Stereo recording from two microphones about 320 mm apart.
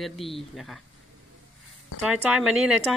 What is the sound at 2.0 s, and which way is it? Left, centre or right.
Speech, centre.